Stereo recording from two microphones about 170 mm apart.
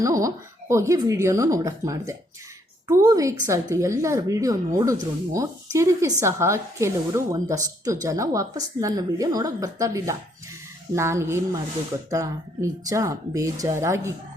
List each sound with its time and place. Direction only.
0.0 s a woman's voice: 20° right (ahead or behind)